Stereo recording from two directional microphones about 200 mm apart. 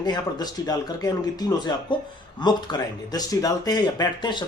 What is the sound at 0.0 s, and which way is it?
Speech, 20° left (ahead or behind).